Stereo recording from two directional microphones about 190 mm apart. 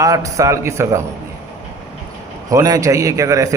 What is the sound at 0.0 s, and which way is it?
A man's voice, 15° right (ahead or behind).